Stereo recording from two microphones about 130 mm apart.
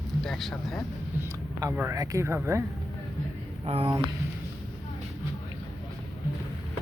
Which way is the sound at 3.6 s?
45° right (ahead or behind).